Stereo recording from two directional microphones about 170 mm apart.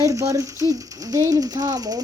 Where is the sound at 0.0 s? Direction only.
20° right (ahead or behind).